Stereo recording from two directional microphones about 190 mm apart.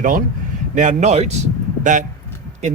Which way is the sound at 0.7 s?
40° right (ahead or behind).